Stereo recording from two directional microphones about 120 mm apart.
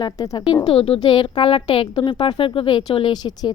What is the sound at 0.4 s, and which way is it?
A woman's voice, 50° left (ahead or behind).